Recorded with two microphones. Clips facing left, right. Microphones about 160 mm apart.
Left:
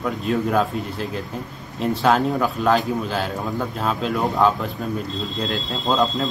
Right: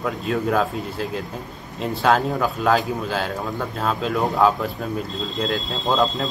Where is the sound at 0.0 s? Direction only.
Centre (ahead or behind).